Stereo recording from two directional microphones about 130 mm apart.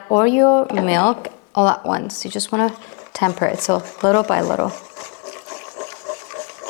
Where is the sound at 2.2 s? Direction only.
15° left (ahead or behind).